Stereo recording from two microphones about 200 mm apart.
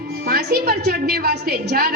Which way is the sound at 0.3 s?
50° right (ahead or behind).